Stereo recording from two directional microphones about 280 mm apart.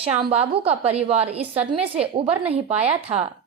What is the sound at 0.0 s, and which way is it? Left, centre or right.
A woman's voice, right.